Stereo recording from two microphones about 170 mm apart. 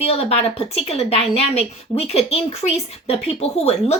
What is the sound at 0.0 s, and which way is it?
A woman's voice, 35° left (ahead or behind).